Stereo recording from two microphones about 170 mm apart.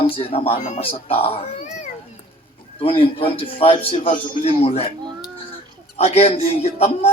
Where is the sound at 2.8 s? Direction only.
30° left (ahead or behind).